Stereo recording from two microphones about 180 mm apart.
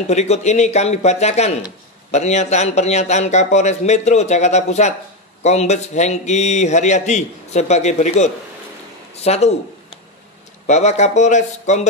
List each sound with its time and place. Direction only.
0.1 s a man's voice: 40° left (ahead or behind)
10.7 s a man's voice: 40° left (ahead or behind)